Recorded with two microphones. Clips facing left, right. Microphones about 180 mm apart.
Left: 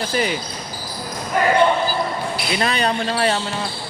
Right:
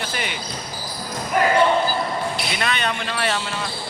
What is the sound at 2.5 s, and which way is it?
A man's voice, 35° left (ahead or behind).